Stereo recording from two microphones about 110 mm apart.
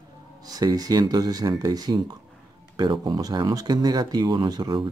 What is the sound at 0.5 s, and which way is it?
Speech, 35° right (ahead or behind).